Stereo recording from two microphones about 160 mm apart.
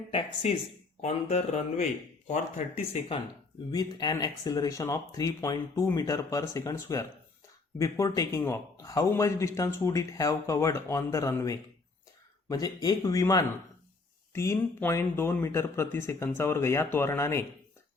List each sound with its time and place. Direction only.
0.1 s a man's voice: 35° left (ahead or behind)
3.7 s speech: 25° left (ahead or behind)